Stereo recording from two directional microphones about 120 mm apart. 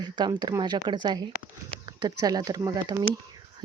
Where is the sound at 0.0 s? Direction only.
35° right (ahead or behind).